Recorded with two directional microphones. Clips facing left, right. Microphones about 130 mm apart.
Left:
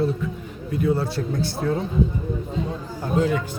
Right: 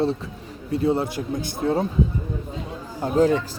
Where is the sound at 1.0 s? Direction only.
15° right (ahead or behind).